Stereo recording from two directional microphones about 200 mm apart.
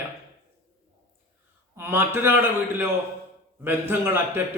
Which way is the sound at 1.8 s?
10° right (ahead or behind).